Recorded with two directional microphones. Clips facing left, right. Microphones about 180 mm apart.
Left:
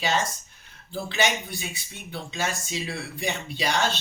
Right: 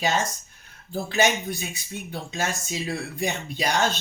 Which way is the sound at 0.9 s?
45° right (ahead or behind).